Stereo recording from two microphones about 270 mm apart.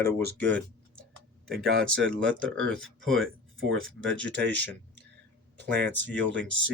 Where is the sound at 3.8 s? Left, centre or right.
Centre.